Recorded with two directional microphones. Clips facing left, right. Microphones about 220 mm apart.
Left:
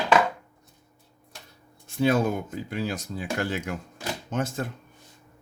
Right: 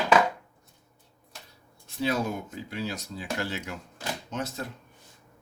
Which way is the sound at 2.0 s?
50° left (ahead or behind).